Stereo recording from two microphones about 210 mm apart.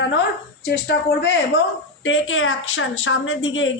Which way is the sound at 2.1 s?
70° left (ahead or behind).